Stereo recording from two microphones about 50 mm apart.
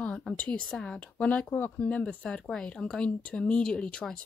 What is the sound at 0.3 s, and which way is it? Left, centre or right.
Speech, centre.